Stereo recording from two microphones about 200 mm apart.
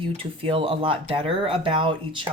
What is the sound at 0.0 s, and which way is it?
A woman's voice, 25° right (ahead or behind).